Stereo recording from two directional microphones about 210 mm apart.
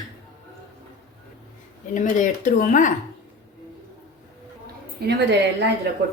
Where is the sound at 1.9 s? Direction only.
40° left (ahead or behind).